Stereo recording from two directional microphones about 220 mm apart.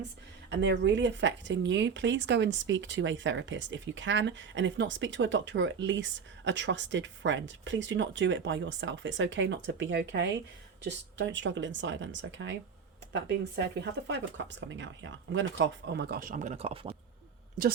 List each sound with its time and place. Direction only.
0.5 s speech: 55° right (ahead or behind); by 16.9 s 25° right (ahead or behind)
17.6 s a woman's voice: 40° right (ahead or behind)